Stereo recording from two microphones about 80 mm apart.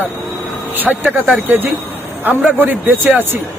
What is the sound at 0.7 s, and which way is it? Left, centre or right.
A man's voice, right.